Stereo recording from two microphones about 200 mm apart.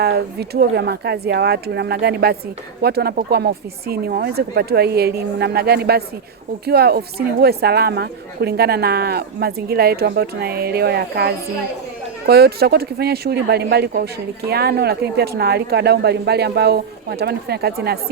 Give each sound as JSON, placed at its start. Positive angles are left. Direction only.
{"t": 0.0, "sound": "a woman's voice", "side_deg": -50}